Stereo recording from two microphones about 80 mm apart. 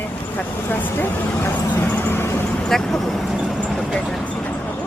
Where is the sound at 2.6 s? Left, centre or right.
Centre.